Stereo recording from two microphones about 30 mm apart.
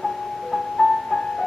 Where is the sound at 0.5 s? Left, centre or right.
Centre.